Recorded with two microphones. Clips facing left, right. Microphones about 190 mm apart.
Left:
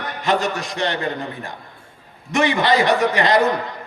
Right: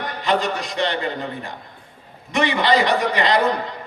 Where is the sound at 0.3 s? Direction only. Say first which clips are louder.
Left 1 dB; 45° left (ahead or behind).